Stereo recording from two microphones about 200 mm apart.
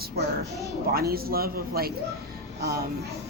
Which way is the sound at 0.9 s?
50° right (ahead or behind).